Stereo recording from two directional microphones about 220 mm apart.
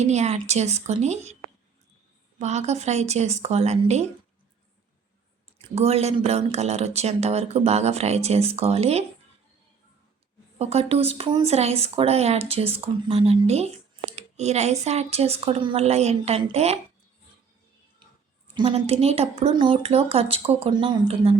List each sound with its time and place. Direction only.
0.0 s a woman's voice: 30° right (ahead or behind)
2.4 s speech: 30° right (ahead or behind)
5.5 s speech: 30° right (ahead or behind)
10.6 s speech: 30° right (ahead or behind)
18.5 s speech: 25° right (ahead or behind)